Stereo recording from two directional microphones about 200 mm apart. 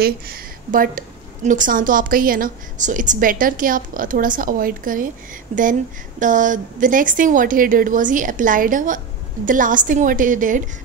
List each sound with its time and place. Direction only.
0.0 s a woman's voice: 50° right (ahead or behind)